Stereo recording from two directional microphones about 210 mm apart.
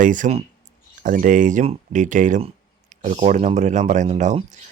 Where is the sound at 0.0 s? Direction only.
40° right (ahead or behind).